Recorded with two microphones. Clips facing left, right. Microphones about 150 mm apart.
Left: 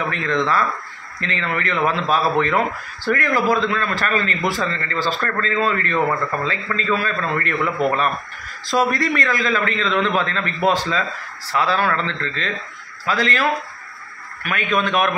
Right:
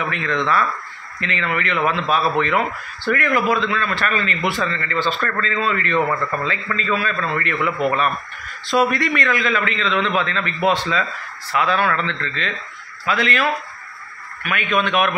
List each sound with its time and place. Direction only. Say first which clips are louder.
0.1 s a man's voice: even; 35° left (ahead or behind)